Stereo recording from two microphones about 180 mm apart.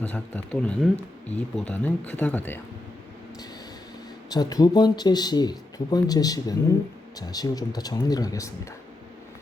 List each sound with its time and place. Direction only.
0.0 s speech: 10° left (ahead or behind)
4.3 s speech: 20° left (ahead or behind)